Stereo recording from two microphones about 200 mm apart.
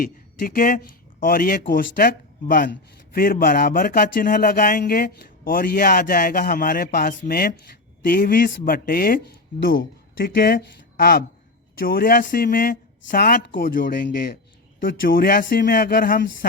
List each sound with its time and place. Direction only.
0.0 s speech: 45° left (ahead or behind)
3.2 s speech: 45° left (ahead or behind)